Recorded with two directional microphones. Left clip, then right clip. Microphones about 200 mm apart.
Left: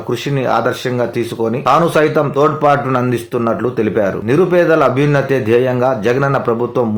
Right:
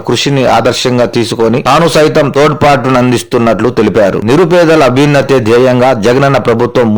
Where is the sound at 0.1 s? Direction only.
50° right (ahead or behind).